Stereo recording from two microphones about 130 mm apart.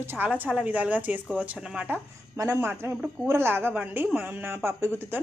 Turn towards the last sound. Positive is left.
turn(degrees=-20)  # may be behind; listen again after turning